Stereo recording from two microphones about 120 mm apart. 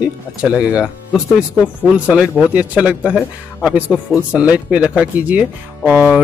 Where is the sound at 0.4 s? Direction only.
10° right (ahead or behind).